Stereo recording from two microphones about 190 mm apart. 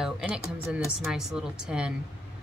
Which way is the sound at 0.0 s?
Centre (ahead or behind).